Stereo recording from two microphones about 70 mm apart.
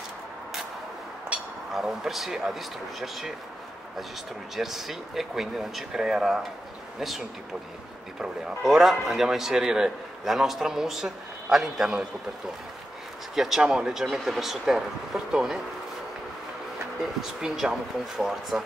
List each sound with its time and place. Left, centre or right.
1.3 s a sound: centre
1.7 s a man's voice: centre
4.6 s a man's voice: centre
13.3 s a man's voice: centre
17.2 s a man's voice: centre